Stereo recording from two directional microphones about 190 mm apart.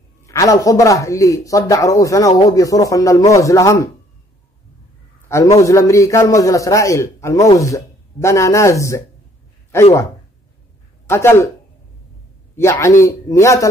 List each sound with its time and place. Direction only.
0.3 s a man's voice: 15° left (ahead or behind)
5.3 s a man's voice: 15° left (ahead or behind)
11.1 s a man's voice: 15° left (ahead or behind)
12.5 s a man's voice: 15° left (ahead or behind)